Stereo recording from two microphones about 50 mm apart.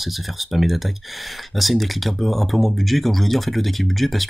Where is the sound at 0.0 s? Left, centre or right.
Centre.